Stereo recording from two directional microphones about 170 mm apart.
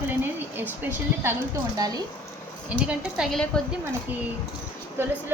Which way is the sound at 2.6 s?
5° right (ahead or behind).